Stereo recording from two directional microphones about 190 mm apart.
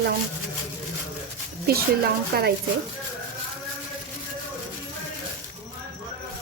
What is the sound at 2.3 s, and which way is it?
Speech, 50° right (ahead or behind).